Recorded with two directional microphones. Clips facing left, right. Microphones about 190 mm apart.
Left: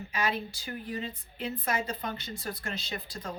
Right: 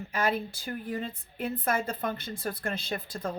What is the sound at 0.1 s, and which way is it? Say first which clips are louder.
A woman's voice: right 3 dB; 55° right (ahead or behind).